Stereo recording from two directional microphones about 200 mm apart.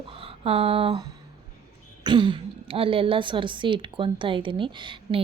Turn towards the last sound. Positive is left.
turn(degrees=-25)  # may be behind; listen again after turning